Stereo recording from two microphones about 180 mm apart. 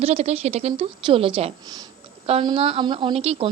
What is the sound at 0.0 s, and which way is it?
Speech, 35° right (ahead or behind).